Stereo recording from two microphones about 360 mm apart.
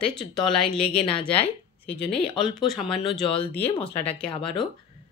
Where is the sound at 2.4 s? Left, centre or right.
Centre.